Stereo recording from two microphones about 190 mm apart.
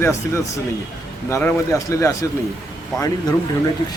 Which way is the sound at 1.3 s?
10° left (ahead or behind).